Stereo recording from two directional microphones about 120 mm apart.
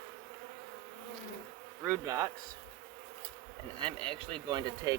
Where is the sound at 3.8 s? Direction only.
45° right (ahead or behind).